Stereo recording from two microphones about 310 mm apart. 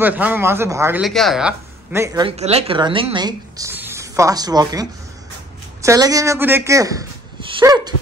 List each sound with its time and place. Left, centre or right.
0.0 s speech: centre